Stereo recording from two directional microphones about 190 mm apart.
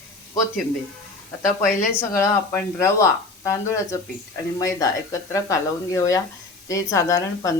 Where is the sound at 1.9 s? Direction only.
15° left (ahead or behind).